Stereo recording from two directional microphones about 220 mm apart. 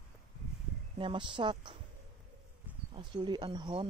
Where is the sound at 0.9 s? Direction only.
20° right (ahead or behind).